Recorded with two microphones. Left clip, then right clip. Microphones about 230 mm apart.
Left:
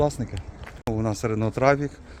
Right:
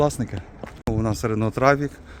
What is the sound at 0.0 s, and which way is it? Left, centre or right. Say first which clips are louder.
Speech: right 2 dB; centre.